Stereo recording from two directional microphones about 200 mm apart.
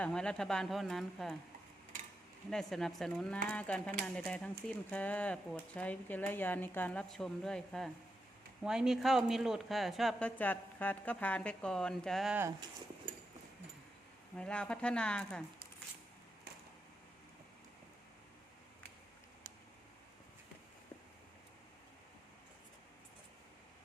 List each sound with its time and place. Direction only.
0.0 s speech: 5° left (ahead or behind)
2.5 s speech: centre (ahead or behind)
12.4 s speech: 15° right (ahead or behind)
14.3 s speech: 5° left (ahead or behind)